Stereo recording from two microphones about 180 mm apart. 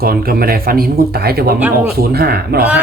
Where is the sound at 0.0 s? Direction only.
55° right (ahead or behind).